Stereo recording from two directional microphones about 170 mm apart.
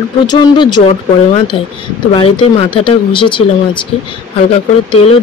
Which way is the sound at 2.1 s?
30° left (ahead or behind).